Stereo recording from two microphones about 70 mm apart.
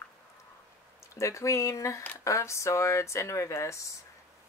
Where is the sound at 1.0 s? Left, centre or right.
Left.